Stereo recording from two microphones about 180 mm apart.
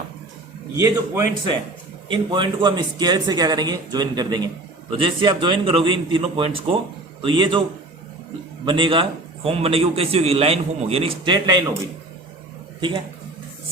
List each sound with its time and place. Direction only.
0.8 s a man's voice: 15° right (ahead or behind)
8.6 s a man's voice: 30° right (ahead or behind)